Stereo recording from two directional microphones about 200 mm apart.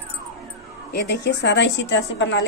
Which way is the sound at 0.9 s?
60° left (ahead or behind).